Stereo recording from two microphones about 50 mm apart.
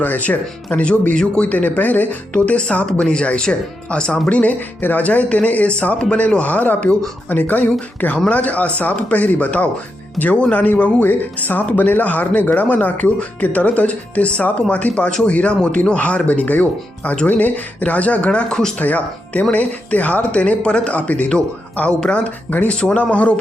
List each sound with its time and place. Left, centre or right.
0.0 s speech: left; by 18.7 s centre
18.8 s speech: left
22.4 s speech: left
22.7 s speech: left